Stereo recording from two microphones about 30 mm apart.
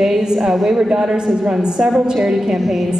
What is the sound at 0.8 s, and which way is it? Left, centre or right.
A woman's voice, right.